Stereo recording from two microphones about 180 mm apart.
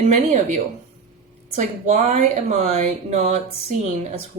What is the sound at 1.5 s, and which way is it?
Speech, 40° right (ahead or behind).